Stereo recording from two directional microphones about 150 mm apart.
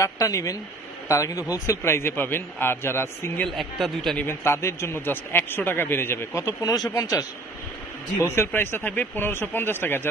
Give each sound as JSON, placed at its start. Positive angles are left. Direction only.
{"t": 0.0, "sound": "a man's voice", "side_deg": 20}
{"t": 3.4, "sound": "speech", "side_deg": 0}
{"t": 4.3, "sound": "a man's voice", "side_deg": 15}
{"t": 8.3, "sound": "a man's voice", "side_deg": 15}